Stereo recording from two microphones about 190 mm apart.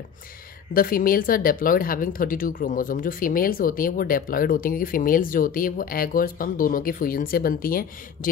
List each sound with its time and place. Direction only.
0.7 s speech: 50° left (ahead or behind)